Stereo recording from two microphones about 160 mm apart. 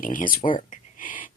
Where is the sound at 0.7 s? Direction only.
55° left (ahead or behind).